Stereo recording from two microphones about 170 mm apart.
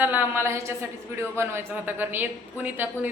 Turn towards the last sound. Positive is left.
turn(degrees=-10)  # may be behind; listen again after turning